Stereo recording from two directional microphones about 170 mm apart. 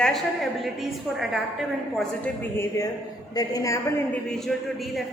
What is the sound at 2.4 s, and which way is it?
A woman's voice, 15° left (ahead or behind).